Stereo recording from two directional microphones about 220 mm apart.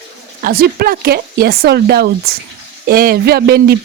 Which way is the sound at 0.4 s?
45° right (ahead or behind).